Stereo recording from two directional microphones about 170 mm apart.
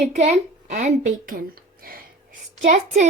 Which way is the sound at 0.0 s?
45° right (ahead or behind).